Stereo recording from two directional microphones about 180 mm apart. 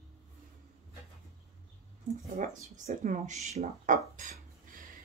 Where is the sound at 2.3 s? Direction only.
45° right (ahead or behind).